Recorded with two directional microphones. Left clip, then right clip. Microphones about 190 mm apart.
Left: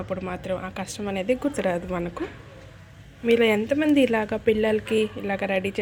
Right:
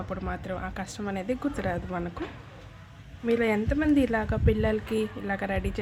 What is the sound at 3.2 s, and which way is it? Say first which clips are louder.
Speech: left 6 dB; 10° left (ahead or behind).